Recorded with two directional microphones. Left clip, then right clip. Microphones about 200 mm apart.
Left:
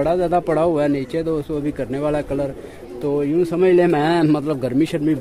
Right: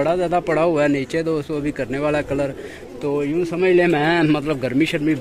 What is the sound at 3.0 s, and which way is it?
A man's voice, 25° left (ahead or behind).